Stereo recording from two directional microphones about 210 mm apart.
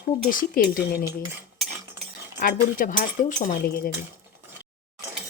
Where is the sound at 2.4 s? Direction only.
40° left (ahead or behind).